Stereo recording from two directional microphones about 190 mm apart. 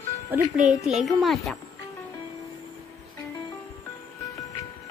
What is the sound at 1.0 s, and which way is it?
Speech, centre (ahead or behind).